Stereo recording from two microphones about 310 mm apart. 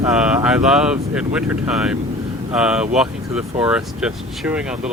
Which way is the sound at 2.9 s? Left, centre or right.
Centre.